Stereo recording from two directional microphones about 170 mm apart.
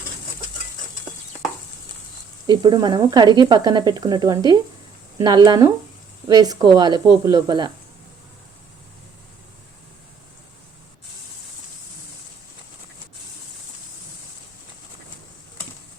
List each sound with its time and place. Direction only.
2.5 s speech: 25° right (ahead or behind)